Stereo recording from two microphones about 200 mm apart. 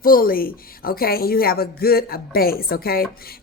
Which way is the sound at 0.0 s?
45° left (ahead or behind).